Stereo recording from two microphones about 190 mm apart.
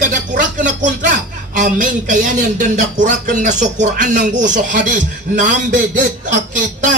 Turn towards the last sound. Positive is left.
turn(degrees=-40)  # may be behind; listen again after turning